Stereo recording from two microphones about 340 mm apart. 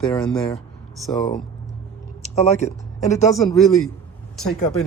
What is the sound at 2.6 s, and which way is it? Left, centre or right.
Speech, centre.